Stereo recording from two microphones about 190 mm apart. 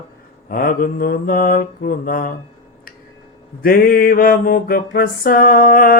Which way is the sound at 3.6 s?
50° left (ahead or behind).